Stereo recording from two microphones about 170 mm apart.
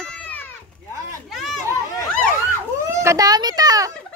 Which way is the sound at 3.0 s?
20° right (ahead or behind).